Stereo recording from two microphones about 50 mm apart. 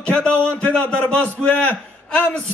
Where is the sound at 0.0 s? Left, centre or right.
Left.